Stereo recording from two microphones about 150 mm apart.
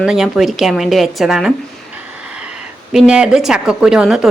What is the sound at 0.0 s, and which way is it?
A woman's voice, 5° right (ahead or behind).